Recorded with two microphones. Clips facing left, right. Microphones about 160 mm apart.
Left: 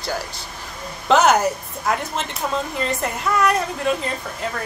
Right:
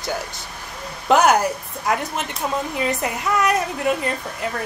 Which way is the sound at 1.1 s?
10° right (ahead or behind).